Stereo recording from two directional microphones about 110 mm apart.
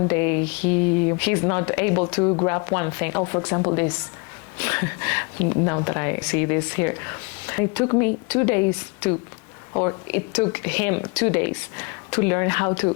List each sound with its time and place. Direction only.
0.1 s speech: 20° left (ahead or behind)
2.2 s speech: 30° left (ahead or behind)
4.5 s speech: 20° left (ahead or behind)